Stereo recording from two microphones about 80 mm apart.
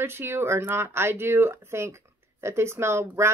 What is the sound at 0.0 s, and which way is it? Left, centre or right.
A woman's voice, right.